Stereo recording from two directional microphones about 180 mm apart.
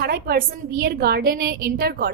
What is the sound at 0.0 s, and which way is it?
A woman's voice, 60° right (ahead or behind).